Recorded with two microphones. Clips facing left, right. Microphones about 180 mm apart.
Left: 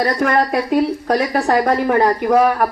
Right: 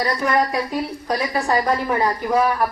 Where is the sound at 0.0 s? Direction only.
60° left (ahead or behind).